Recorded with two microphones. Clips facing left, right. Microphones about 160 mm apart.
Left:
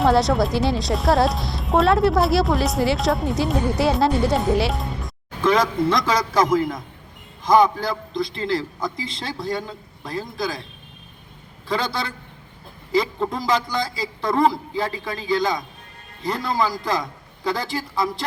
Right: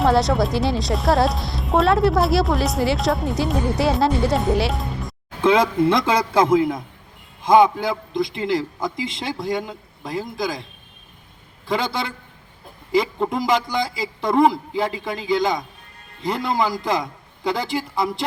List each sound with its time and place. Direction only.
0.0 s a woman's voice: centre (ahead or behind)
5.4 s a man's voice: 25° right (ahead or behind)
11.7 s a man's voice: 20° right (ahead or behind)